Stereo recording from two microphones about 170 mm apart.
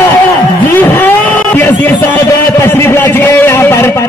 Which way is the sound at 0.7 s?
10° left (ahead or behind).